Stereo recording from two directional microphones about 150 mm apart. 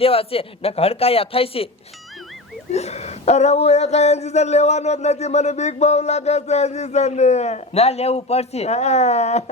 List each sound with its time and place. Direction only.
0.0 s a man's voice: 40° left (ahead or behind)
2.7 s speech: 45° left (ahead or behind)